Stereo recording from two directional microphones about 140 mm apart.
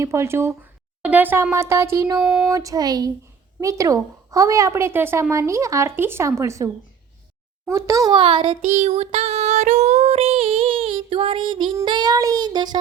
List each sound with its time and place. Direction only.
0.0 s a woman's voice: 20° right (ahead or behind)
2.2 s a sound: 5° right (ahead or behind)
2.5 s a woman's voice: 25° right (ahead or behind)
7.7 s a woman's voice: 20° right (ahead or behind)
8.1 s child singing: 35° right (ahead or behind)